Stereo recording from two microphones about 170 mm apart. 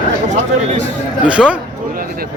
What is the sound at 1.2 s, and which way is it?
Speech, 5° right (ahead or behind).